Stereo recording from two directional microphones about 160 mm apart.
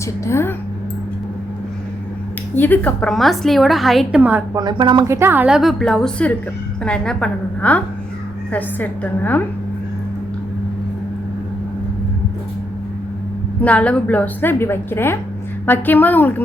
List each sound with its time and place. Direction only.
0.3 s a woman's voice: 15° left (ahead or behind)
2.6 s a woman's voice: 10° left (ahead or behind)
4.2 s a woman's voice: 10° right (ahead or behind)
4.5 s a woman's voice: 25° right (ahead or behind)
5.0 s a woman's voice: 15° right (ahead or behind); by 9.4 s 10° left (ahead or behind)
13.6 s a woman's voice: 10° left (ahead or behind)